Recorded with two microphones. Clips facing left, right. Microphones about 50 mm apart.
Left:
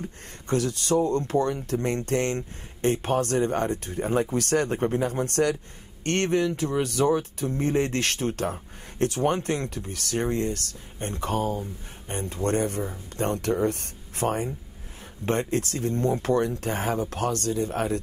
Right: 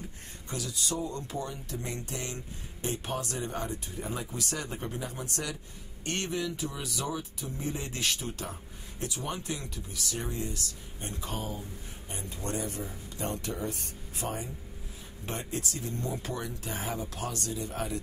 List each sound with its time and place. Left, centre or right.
0.5 s speech: left